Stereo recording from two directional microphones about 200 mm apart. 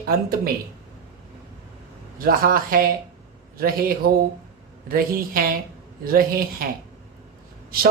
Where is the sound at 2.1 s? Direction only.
45° right (ahead or behind).